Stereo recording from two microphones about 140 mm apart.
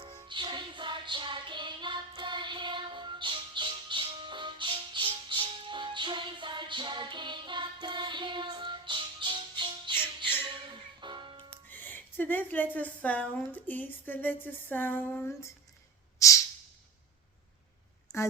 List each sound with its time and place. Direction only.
0.0 s music: 35° right (ahead or behind)
11.7 s speech: 15° left (ahead or behind)
14.4 s a sound: 15° left (ahead or behind)
16.1 s snort: 25° left (ahead or behind)
18.1 s speech: 20° left (ahead or behind)